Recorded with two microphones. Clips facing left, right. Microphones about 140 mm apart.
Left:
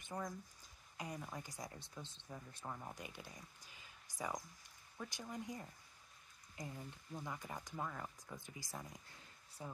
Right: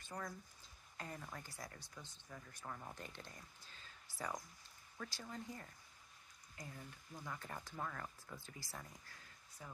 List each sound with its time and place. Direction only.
0.0 s speech: 20° left (ahead or behind)